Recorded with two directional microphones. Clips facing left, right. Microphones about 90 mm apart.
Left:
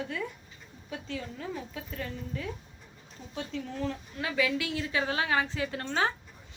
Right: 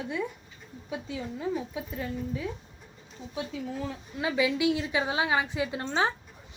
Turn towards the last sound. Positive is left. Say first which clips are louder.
# right 2 dB
turn(degrees=-15)  # may be behind; listen again after turning